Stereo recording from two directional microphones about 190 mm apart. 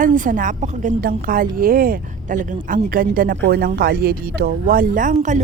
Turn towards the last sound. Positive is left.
turn(degrees=-40)  # may be behind; listen again after turning